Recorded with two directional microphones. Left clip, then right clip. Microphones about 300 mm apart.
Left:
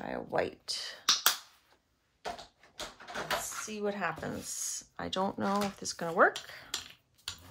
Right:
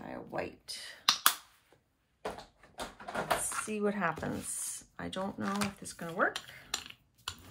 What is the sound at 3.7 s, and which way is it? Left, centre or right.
Speech, centre.